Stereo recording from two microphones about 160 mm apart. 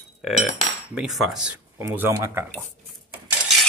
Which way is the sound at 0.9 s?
Centre (ahead or behind).